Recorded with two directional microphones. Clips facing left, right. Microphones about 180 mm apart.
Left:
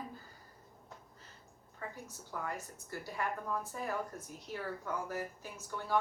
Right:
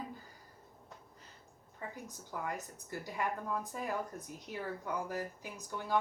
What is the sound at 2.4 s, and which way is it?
A woman's voice, 15° right (ahead or behind).